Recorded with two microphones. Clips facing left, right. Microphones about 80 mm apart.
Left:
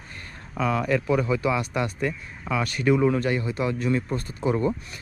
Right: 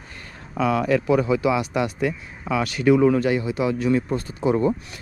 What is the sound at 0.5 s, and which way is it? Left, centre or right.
Speech, right.